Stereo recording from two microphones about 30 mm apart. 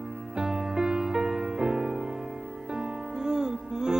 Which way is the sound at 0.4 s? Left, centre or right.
Centre.